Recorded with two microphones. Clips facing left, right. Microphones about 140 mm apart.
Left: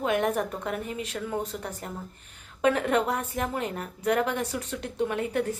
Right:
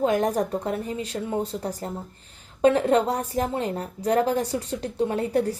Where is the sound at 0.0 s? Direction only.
35° right (ahead or behind).